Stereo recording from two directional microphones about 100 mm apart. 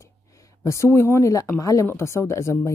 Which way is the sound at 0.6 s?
30° left (ahead or behind).